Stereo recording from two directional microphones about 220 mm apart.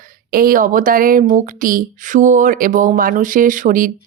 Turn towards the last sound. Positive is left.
turn(degrees=-40)  # may be behind; listen again after turning